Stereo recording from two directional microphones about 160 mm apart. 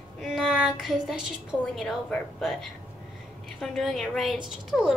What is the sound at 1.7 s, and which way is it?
A woman's voice, 5° left (ahead or behind).